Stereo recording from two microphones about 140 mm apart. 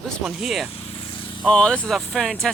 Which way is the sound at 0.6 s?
40° left (ahead or behind).